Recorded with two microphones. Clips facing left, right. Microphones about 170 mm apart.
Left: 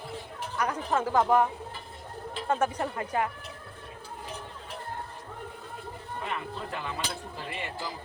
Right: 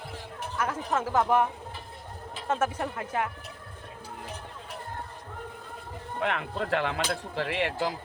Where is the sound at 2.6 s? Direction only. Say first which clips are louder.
Left 1 dB; 5° right (ahead or behind).